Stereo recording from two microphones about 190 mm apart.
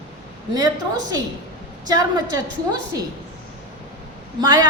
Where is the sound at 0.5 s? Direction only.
20° right (ahead or behind).